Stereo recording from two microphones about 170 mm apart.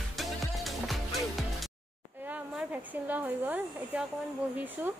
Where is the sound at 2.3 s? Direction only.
10° right (ahead or behind).